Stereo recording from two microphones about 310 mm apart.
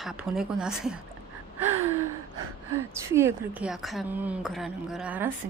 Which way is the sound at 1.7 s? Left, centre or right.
Right.